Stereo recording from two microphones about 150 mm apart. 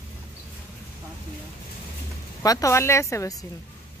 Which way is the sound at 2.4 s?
20° left (ahead or behind).